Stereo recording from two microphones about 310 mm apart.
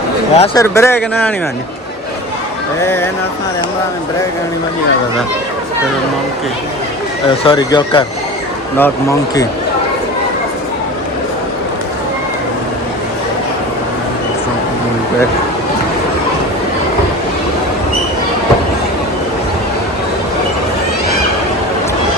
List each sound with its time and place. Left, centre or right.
0.3 s speech: centre
7.3 s speech: centre